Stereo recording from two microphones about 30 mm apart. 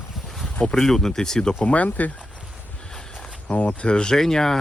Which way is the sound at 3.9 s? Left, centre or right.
Left.